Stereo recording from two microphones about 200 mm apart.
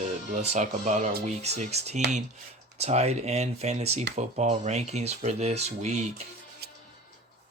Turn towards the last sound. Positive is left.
turn(degrees=-35)  # may be behind; listen again after turning